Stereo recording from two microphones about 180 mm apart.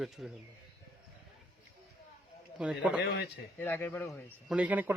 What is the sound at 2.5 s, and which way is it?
Speech, 5° right (ahead or behind).